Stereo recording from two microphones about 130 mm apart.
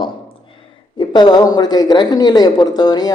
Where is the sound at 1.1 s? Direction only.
30° left (ahead or behind).